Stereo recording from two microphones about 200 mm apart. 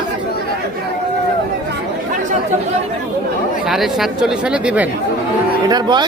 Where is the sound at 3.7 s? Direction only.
Centre (ahead or behind).